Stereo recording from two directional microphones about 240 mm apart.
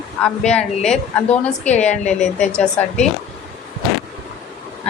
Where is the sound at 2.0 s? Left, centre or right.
Left.